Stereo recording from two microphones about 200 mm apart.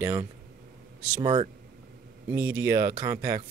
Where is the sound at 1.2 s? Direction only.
25° right (ahead or behind).